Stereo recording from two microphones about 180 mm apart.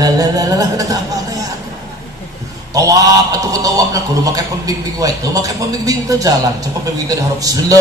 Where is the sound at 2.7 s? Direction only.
20° right (ahead or behind).